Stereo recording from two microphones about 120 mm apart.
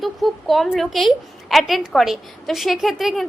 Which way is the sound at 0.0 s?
Centre (ahead or behind).